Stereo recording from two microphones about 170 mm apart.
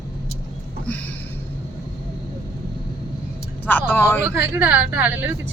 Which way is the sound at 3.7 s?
10° left (ahead or behind).